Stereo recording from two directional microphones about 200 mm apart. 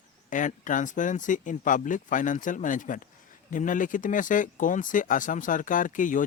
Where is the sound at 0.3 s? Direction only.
40° left (ahead or behind).